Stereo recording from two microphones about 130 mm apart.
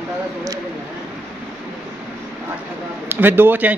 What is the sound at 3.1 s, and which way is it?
Speech, 15° right (ahead or behind).